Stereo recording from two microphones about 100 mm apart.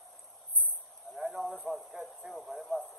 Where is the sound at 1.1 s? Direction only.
5° right (ahead or behind).